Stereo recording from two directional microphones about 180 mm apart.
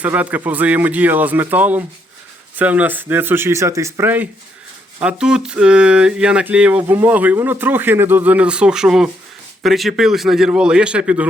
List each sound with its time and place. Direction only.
0.0 s a man's voice: 10° right (ahead or behind)